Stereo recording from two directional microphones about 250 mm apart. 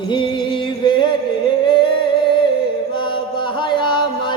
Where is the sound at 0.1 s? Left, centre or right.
Centre.